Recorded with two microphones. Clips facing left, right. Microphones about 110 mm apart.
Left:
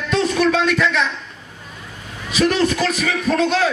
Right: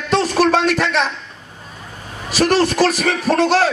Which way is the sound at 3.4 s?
65° right (ahead or behind).